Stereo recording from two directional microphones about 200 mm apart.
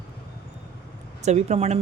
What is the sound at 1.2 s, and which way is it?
Speech, 35° right (ahead or behind).